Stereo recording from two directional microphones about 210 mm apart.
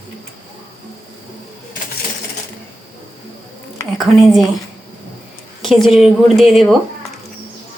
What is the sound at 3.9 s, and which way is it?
Speech, centre (ahead or behind).